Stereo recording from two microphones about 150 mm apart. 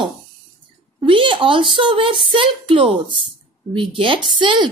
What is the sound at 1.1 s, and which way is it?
A woman's voice, 35° right (ahead or behind).